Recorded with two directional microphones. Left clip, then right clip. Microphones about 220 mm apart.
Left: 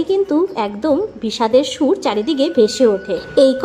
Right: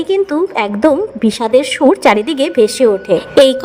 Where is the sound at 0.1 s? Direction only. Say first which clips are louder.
Right 4 dB; 30° right (ahead or behind).